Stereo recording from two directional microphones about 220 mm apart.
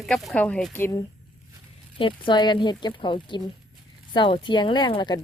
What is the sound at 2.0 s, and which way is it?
Speech, 20° left (ahead or behind).